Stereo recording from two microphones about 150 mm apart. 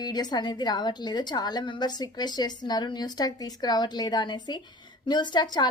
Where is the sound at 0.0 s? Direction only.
25° left (ahead or behind).